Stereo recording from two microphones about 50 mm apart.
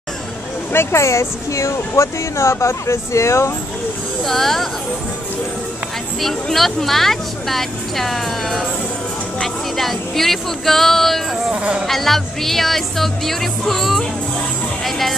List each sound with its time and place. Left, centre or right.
0.7 s speech: left
4.2 s speech: centre
6.2 s speech: centre
11.5 s speech: right
11.8 s speech: centre